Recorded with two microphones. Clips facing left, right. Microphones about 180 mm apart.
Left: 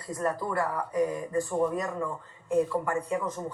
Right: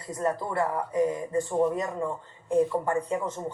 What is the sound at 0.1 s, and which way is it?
Speech, 20° right (ahead or behind).